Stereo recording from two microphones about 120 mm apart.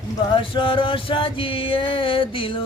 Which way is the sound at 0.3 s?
45° left (ahead or behind).